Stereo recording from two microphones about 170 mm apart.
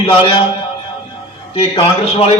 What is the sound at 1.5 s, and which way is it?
Speech, 30° left (ahead or behind).